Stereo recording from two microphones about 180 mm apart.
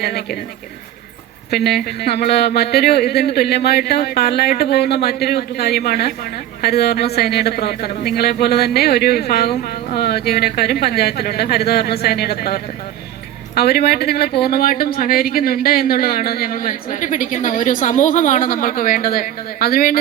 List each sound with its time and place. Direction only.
0.0 s speech: 60° left (ahead or behind)
1.5 s speech: 60° left (ahead or behind)
13.6 s speech: 60° left (ahead or behind)